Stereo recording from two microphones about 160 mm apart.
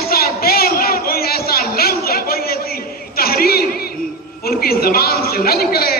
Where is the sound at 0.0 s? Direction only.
70° left (ahead or behind).